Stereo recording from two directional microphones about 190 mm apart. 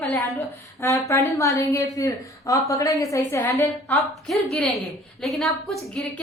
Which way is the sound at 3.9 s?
Centre (ahead or behind).